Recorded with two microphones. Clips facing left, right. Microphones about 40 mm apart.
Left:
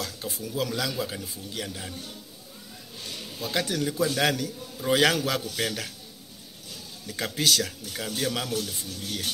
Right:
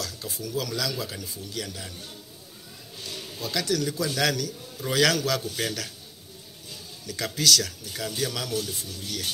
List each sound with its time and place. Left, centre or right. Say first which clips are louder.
0.0 s speech: left 1 dB; left
3.3 s a man's voice: right 1 dB; left
7.2 s speech: right 1 dB; left